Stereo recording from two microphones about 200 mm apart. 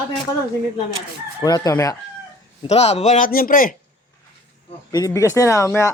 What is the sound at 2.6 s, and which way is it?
A man's voice, 30° left (ahead or behind).